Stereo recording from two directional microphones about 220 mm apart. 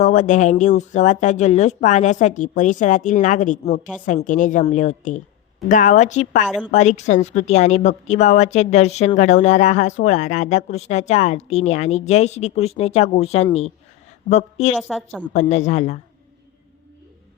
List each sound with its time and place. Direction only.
0.0 s a woman's voice: 35° left (ahead or behind)
14.8 s a woman's voice: centre (ahead or behind)
15.2 s speech: 30° left (ahead or behind)